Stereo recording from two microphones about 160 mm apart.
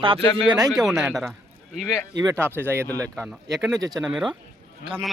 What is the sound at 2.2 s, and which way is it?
Speech, 20° right (ahead or behind).